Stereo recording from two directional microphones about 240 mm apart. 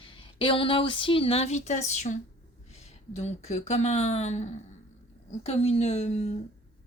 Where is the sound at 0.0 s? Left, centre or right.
Left.